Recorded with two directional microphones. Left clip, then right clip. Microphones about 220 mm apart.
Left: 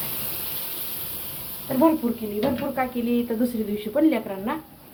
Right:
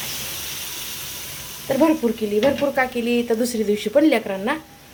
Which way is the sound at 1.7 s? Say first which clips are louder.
Right 3 dB; 50° right (ahead or behind).